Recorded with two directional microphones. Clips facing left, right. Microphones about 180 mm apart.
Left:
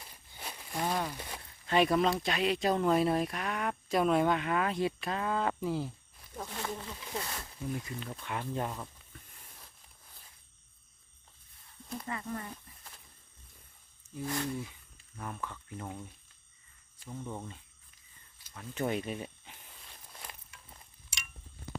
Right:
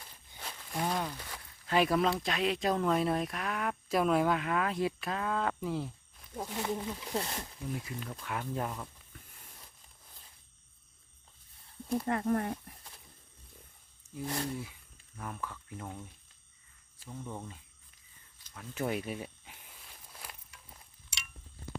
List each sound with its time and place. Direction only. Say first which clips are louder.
0.0 s a sound: left 1 dB; 10° left (ahead or behind)
0.7 s speech: even; centre (ahead or behind)
6.3 s speech: right 4 dB; 15° right (ahead or behind)
7.2 s speech: right 2 dB; 25° right (ahead or behind)
7.7 s speech: left 1 dB; 5° right (ahead or behind)
12.0 s speech: right 8 dB; 60° right (ahead or behind)
14.3 s speech: left 1 dB; 30° right (ahead or behind)
14.6 s a sound: left 1 dB; 5° right (ahead or behind)
15.5 s speech: left 1 dB; 5° left (ahead or behind)
17.1 s speech: left 1 dB; 5° left (ahead or behind)
18.5 s walk: left 1 dB; 5° right (ahead or behind)